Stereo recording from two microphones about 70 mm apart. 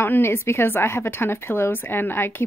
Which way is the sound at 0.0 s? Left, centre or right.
Left.